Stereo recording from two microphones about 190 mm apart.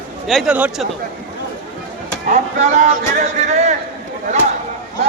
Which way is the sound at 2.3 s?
40° right (ahead or behind).